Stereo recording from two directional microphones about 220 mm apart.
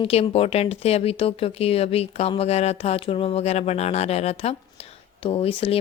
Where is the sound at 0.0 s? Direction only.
25° left (ahead or behind).